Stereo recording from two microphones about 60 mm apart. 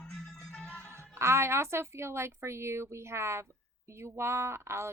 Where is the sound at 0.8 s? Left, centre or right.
Right.